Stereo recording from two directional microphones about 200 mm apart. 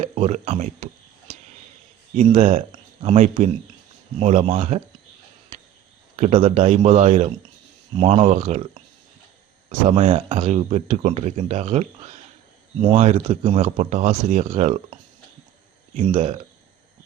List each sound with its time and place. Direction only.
0.0 s speech: 35° right (ahead or behind)
2.1 s speech: 30° right (ahead or behind)
6.1 s speech: 30° right (ahead or behind)
13.7 s speech: 40° right (ahead or behind)